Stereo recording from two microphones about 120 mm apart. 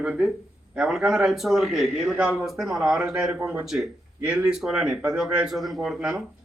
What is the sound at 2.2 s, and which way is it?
Speech, 15° right (ahead or behind).